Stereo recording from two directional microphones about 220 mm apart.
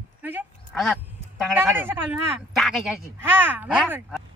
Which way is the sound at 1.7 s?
10° right (ahead or behind).